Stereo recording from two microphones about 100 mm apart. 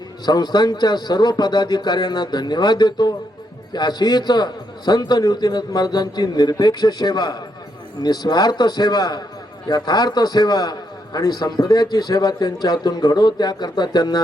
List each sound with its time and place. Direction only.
0.3 s a man's voice: 45° left (ahead or behind)